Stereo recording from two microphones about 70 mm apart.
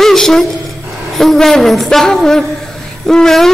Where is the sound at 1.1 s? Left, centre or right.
Centre.